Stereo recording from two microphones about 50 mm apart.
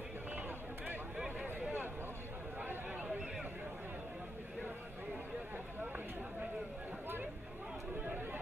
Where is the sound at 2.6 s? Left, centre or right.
Right.